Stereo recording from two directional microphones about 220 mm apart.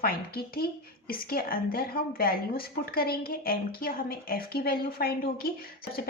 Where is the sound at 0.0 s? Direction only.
45° left (ahead or behind).